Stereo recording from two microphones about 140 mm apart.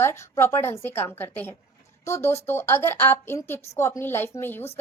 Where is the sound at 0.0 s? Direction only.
15° left (ahead or behind).